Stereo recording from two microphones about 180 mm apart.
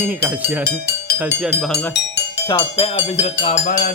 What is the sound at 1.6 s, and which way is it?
Speech, 5° left (ahead or behind).